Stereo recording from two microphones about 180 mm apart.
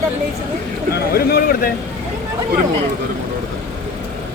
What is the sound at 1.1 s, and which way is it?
Speech, 60° left (ahead or behind).